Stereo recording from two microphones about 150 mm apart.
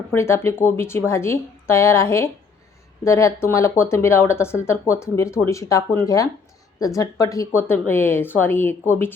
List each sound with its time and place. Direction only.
0.1 s speech: 15° left (ahead or behind)